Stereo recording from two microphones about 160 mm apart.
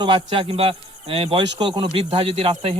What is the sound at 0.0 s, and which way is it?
Speech, 35° right (ahead or behind).